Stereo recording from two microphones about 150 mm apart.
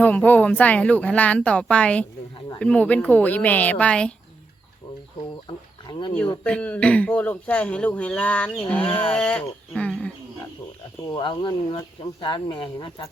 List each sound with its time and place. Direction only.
0.0 s a man's voice: 10° left (ahead or behind)
5.9 s speech: 30° left (ahead or behind)
6.4 s a man's voice: 10° left (ahead or behind)
8.8 s speech: 35° left (ahead or behind)
9.0 s a man's voice: 10° left (ahead or behind)
11.1 s speech: 30° left (ahead or behind)